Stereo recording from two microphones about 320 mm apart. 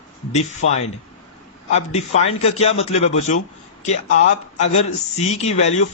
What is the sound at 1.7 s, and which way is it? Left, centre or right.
A man's voice, left.